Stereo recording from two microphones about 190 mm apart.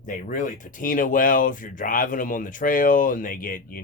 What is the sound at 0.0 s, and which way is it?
Speech, 45° left (ahead or behind).